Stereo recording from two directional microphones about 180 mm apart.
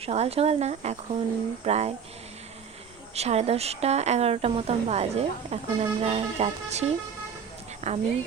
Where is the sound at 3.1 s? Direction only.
35° right (ahead or behind).